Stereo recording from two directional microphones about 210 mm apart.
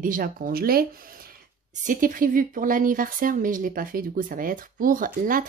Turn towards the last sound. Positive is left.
turn(degrees=-40)  # may be behind; listen again after turning